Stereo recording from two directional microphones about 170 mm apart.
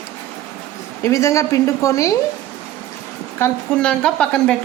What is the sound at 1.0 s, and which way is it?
A woman's voice, 15° left (ahead or behind).